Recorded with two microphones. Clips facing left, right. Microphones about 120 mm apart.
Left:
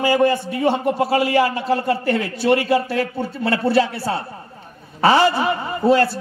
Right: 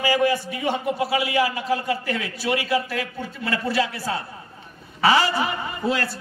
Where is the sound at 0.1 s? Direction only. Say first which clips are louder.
Left 3 dB; 50° left (ahead or behind).